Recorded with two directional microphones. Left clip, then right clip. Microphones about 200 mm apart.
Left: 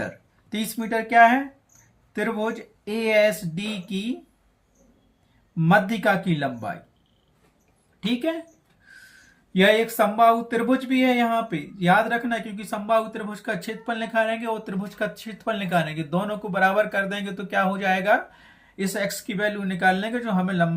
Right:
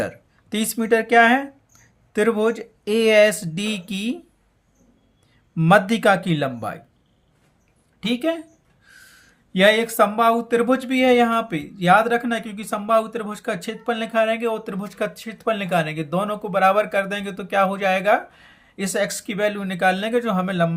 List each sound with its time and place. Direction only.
0.5 s speech: 40° right (ahead or behind)
5.5 s speech: 45° right (ahead or behind)
8.0 s speech: 35° right (ahead or behind)
8.9 s a sound: 35° right (ahead or behind)
9.5 s speech: 35° right (ahead or behind)